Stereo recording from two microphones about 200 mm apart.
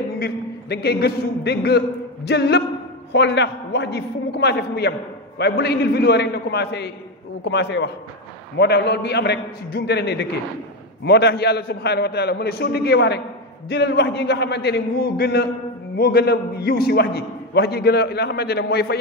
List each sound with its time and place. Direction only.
0.2 s a man's voice: 50° left (ahead or behind)